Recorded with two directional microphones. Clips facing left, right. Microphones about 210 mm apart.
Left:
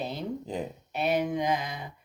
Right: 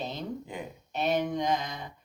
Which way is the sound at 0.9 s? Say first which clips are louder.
Left 1 dB; 5° left (ahead or behind).